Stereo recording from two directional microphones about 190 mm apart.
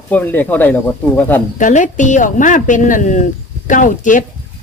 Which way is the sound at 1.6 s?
40° left (ahead or behind).